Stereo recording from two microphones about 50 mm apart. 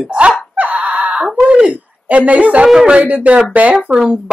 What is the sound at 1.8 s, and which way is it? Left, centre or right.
Speech, right.